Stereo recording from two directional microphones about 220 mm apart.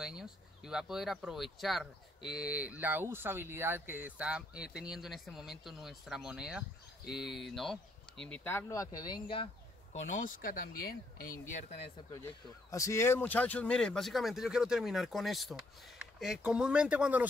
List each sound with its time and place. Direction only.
0.0 s speech: centre (ahead or behind); by 9.5 s 20° left (ahead or behind)
10.1 s speech: 40° left (ahead or behind)
12.7 s speech: 15° left (ahead or behind); by 17.3 s 5° right (ahead or behind)